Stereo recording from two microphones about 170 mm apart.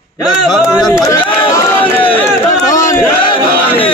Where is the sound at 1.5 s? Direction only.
15° left (ahead or behind).